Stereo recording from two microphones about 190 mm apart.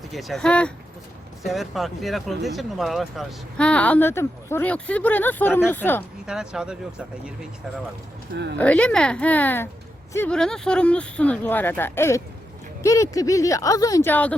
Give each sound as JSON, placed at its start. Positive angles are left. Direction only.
{"t": 0.1, "sound": "speech", "side_deg": 0}
{"t": 6.2, "sound": "speech", "side_deg": -5}
{"t": 8.5, "sound": "speech", "side_deg": 10}